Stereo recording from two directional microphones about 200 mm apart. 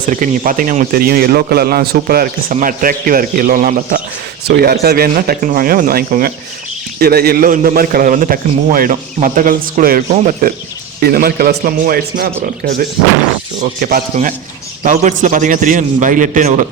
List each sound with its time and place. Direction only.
0.1 s speech: 40° right (ahead or behind)
13.6 s a man's voice: 40° right (ahead or behind)